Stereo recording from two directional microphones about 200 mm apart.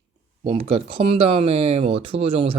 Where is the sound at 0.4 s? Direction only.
30° right (ahead or behind).